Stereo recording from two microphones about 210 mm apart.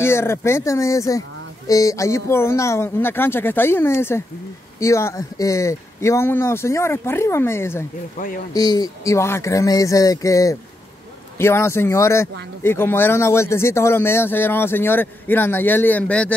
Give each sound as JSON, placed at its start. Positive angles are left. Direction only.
{"t": 0.0, "sound": "speech", "side_deg": 10}